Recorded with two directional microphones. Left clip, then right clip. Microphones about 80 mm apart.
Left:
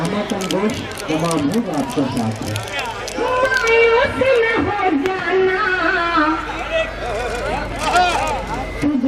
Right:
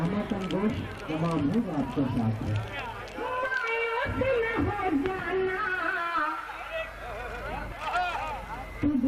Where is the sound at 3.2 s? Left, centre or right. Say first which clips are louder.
Left 13 dB; right.